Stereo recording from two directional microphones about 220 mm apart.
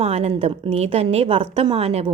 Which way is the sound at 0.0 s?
25° right (ahead or behind).